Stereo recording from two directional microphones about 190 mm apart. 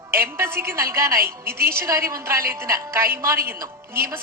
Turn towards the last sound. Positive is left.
turn(degrees=-15)  # may be behind; listen again after turning